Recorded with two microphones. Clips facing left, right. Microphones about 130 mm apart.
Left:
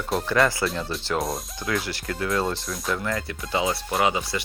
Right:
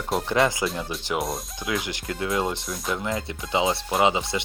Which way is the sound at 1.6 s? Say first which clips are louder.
Left 1 dB; 20° right (ahead or behind).